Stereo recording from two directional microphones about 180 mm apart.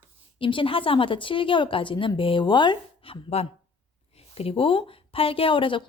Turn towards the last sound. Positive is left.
turn(degrees=30)  # may be behind; listen again after turning